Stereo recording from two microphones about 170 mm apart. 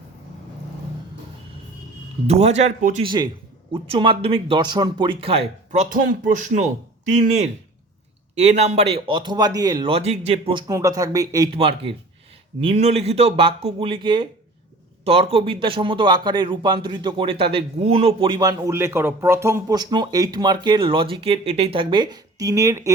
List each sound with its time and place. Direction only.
2.2 s speech: 40° right (ahead or behind)
3.0 s speech: 25° right (ahead or behind); by 6.7 s 50° right (ahead or behind)
8.4 s speech: 40° right (ahead or behind); by 9.9 s 20° right (ahead or behind)
9.9 s speech: 35° right (ahead or behind); by 11.4 s 20° right (ahead or behind)
11.5 s speech: 35° right (ahead or behind)